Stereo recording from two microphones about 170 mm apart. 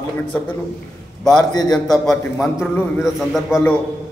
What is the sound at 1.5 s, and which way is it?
Speech, 25° left (ahead or behind).